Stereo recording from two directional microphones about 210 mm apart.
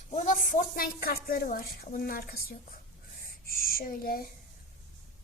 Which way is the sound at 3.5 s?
45° left (ahead or behind).